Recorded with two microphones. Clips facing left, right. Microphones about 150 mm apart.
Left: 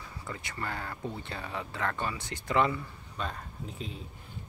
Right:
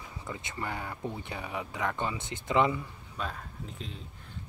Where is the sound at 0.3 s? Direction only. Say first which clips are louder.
Right 1 dB; 20° right (ahead or behind).